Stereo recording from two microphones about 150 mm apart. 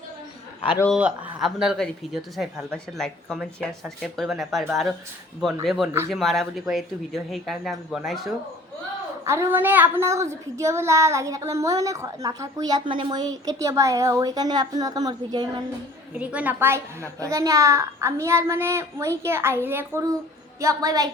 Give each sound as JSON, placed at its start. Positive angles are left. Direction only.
{"t": 0.6, "sound": "a man's voice", "side_deg": 40}
{"t": 0.9, "sound": "speech", "side_deg": -10}
{"t": 9.2, "sound": "a woman's voice", "side_deg": -20}
{"t": 16.1, "sound": "a woman's voice", "side_deg": -10}